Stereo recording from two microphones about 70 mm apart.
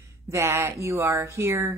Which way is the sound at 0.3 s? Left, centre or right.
Right.